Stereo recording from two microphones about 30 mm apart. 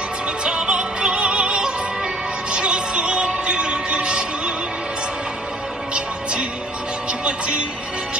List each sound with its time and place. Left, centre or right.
0.4 s music: right
7.1 s music: right